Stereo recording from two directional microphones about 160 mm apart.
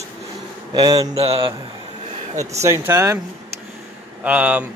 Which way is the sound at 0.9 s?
40° right (ahead or behind).